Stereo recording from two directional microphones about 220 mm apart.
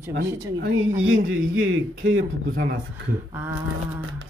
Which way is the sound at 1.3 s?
65° right (ahead or behind).